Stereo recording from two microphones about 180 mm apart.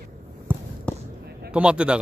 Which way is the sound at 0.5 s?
10° right (ahead or behind).